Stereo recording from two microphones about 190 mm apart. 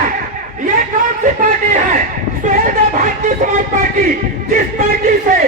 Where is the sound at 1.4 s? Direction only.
45° right (ahead or behind).